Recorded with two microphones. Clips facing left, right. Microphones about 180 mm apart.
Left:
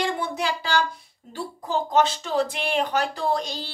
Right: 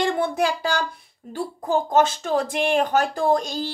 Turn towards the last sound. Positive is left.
turn(degrees=-45)  # may be behind; listen again after turning